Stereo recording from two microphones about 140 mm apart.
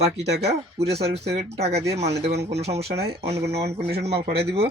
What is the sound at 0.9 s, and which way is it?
Speech, 50° right (ahead or behind).